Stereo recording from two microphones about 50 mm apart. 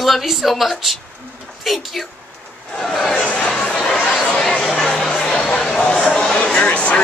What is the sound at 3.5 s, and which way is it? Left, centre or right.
Chatter, centre.